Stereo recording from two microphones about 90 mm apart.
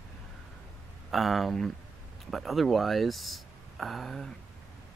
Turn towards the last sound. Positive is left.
turn(degrees=5)  # may be behind; listen again after turning